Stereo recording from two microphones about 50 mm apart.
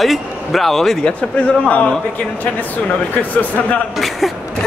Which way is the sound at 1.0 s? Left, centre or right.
Left.